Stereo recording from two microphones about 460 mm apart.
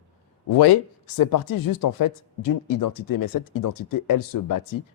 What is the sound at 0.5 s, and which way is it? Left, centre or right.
Speech, left.